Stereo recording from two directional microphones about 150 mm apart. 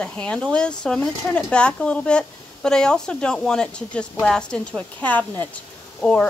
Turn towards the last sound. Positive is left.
turn(degrees=10)  # may be behind; listen again after turning